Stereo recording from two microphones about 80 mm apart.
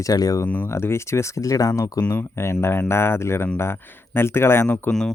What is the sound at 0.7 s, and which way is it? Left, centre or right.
Speech, left.